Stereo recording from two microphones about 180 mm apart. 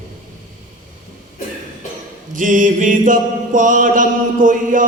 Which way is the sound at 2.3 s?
50° right (ahead or behind).